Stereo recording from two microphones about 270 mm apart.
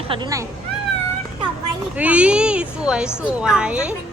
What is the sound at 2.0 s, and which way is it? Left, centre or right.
Speech, centre.